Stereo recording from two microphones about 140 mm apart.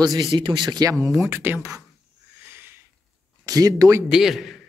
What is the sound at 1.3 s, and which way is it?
Speech, 15° right (ahead or behind).